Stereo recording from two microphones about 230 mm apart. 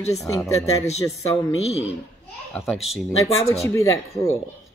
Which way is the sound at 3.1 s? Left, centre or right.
Centre.